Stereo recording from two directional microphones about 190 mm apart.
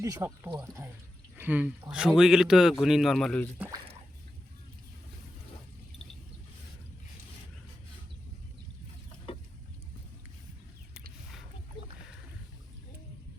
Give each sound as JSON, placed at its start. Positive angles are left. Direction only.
{"t": 0.0, "sound": "speech", "side_deg": -15}
{"t": 9.3, "sound": "chicken", "side_deg": 30}